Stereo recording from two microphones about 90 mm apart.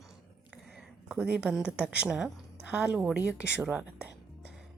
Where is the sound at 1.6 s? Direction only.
15° right (ahead or behind).